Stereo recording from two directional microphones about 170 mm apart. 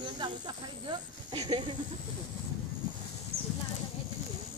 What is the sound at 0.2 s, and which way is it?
Speech, 25° right (ahead or behind).